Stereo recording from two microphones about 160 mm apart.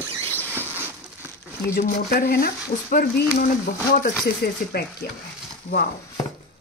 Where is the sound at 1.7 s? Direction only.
60° left (ahead or behind).